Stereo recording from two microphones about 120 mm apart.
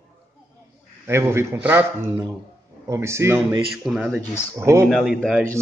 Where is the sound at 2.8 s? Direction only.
25° right (ahead or behind).